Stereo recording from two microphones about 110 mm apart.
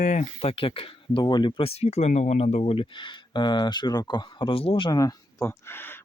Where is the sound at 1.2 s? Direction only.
40° left (ahead or behind).